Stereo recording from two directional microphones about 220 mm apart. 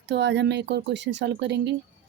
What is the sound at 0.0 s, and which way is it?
A woman's voice, 50° right (ahead or behind).